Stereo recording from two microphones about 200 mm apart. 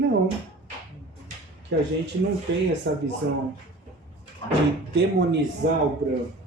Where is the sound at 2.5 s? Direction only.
65° right (ahead or behind).